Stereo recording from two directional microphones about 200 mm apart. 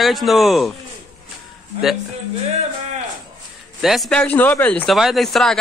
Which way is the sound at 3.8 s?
Centre (ahead or behind).